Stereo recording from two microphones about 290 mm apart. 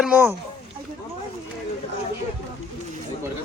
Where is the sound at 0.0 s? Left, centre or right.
Centre.